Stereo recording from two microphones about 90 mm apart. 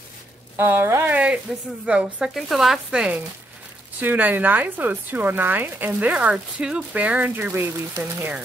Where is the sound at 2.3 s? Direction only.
Centre (ahead or behind).